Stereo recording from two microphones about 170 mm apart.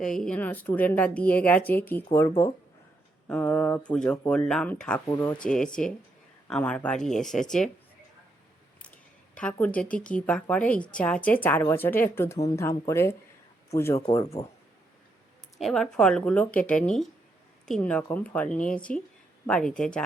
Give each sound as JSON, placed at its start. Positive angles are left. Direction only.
{"t": 0.0, "sound": "speech", "side_deg": 5}
{"t": 3.2, "sound": "speech", "side_deg": 10}
{"t": 9.3, "sound": "speech", "side_deg": 5}
{"t": 15.5, "sound": "speech", "side_deg": 0}